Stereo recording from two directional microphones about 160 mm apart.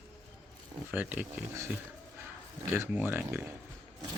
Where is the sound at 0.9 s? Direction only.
10° right (ahead or behind).